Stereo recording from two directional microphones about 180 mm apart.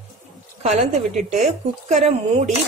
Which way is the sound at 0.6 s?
35° right (ahead or behind).